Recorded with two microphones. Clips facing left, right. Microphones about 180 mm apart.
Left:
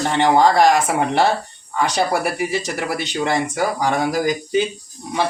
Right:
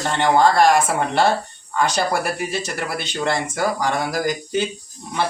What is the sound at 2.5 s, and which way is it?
Speech, 15° left (ahead or behind).